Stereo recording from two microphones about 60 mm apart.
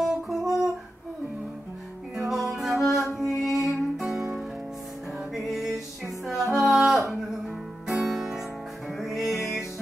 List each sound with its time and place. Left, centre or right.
0.0 s guitar: centre
2.1 s music: centre
9.4 s music: left